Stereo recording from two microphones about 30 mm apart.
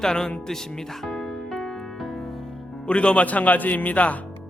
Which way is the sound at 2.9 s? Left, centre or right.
Left.